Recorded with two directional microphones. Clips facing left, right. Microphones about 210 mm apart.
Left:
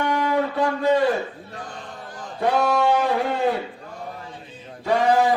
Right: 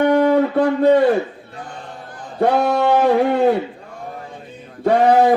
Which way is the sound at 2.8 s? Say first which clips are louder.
Right 5 dB; 55° right (ahead or behind).